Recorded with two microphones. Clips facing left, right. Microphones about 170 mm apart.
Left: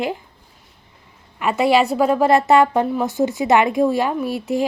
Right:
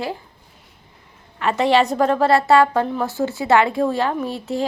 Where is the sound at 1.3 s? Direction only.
10° left (ahead or behind).